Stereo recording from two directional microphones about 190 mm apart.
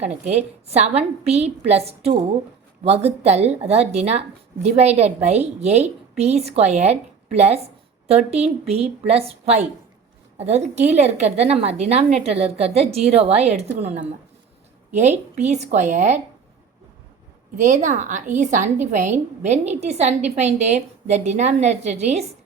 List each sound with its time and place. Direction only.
0.0 s a woman's voice: 35° right (ahead or behind)
17.6 s a woman's voice: 40° right (ahead or behind)